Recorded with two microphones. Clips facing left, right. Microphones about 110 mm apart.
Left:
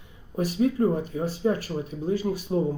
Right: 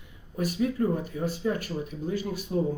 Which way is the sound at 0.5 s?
35° left (ahead or behind).